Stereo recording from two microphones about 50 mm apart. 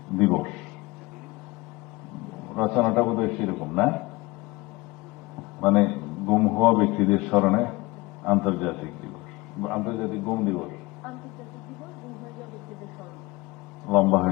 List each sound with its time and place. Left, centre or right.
0.2 s a sound: centre
2.5 s a man's voice: centre
5.5 s a man's voice: centre
13.8 s a man's voice: centre